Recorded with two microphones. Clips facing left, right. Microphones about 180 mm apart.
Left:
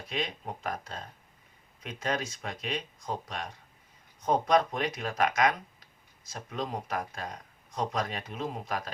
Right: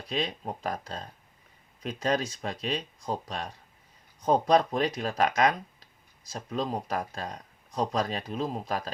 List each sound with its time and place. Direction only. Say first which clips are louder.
0.1 s speech: right 3 dB; 30° right (ahead or behind)